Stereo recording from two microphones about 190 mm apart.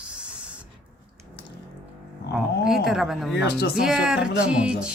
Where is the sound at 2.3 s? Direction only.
Centre (ahead or behind).